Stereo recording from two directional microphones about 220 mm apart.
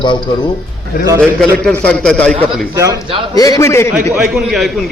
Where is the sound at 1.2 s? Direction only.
5° left (ahead or behind).